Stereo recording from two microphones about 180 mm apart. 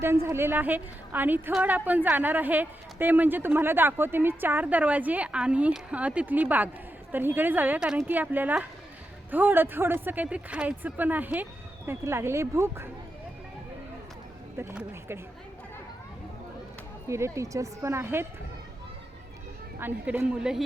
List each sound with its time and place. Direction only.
0.0 s a woman's voice: 15° right (ahead or behind)
14.6 s a woman's voice: 15° right (ahead or behind)
17.1 s a woman's voice: 15° right (ahead or behind)
19.8 s a woman's voice: 10° right (ahead or behind)